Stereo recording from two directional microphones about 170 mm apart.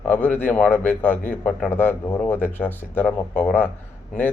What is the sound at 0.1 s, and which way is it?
Speech, 10° left (ahead or behind).